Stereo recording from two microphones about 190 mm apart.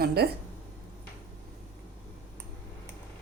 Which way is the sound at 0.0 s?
55° right (ahead or behind).